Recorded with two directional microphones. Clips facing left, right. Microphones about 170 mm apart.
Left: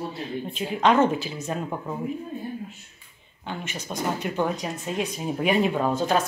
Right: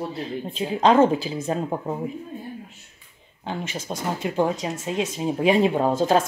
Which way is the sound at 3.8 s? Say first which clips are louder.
Left 1 dB; 30° right (ahead or behind).